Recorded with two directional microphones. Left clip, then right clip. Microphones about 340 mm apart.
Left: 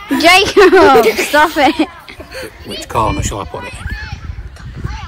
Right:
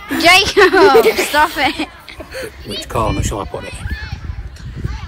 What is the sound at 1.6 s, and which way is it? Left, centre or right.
Speech, centre.